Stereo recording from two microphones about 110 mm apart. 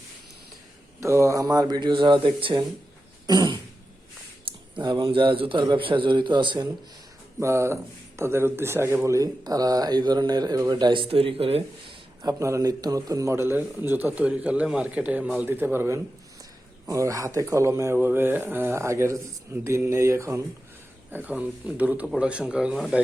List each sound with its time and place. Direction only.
0.9 s speech: 25° right (ahead or behind); by 2.6 s 50° right (ahead or behind)
3.2 s speech: 40° right (ahead or behind)
4.7 s a man's voice: 45° right (ahead or behind)
7.4 s a man's voice: 25° right (ahead or behind); by 11.9 s 60° right (ahead or behind)
12.2 s a man's voice: 30° right (ahead or behind)
21.1 s speech: 15° right (ahead or behind)